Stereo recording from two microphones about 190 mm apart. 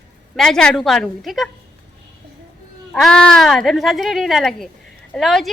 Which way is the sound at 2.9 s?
5° left (ahead or behind).